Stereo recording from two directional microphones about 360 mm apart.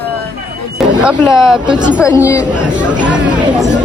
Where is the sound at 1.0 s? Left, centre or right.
Centre.